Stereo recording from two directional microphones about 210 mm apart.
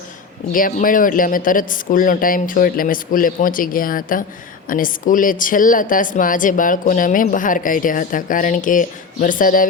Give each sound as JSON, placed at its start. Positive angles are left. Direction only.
{"t": 0.5, "sound": "speech", "side_deg": 40}